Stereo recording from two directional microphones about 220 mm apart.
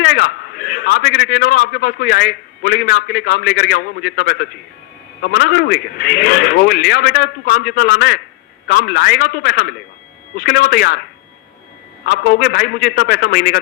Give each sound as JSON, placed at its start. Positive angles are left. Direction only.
{"t": 0.0, "sound": "a man's voice", "side_deg": 50}
{"t": 12.0, "sound": "speech", "side_deg": 45}